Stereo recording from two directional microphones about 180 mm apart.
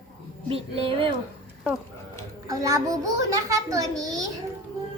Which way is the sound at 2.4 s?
20° right (ahead or behind).